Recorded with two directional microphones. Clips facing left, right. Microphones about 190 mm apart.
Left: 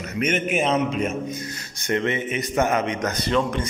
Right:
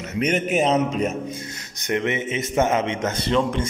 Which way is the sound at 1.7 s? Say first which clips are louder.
Even; 20° right (ahead or behind).